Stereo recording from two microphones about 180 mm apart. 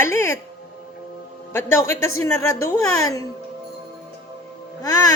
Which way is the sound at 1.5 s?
15° left (ahead or behind).